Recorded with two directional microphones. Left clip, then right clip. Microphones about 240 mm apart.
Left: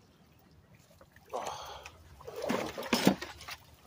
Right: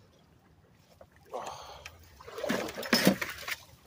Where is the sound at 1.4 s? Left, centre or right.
Centre.